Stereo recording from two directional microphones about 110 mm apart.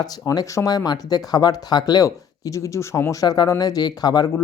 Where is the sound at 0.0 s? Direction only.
35° left (ahead or behind).